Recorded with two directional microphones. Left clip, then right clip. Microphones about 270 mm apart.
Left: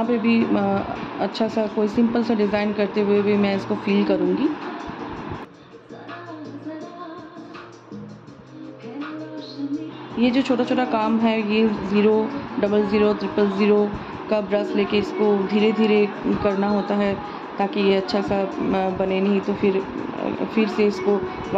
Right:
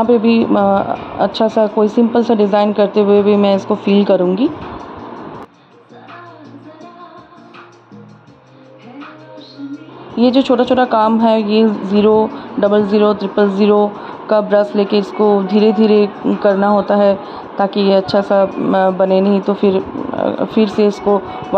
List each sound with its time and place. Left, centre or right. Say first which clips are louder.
0.0 s speech: right 9 dB; right
10.1 s speech: right 9 dB; right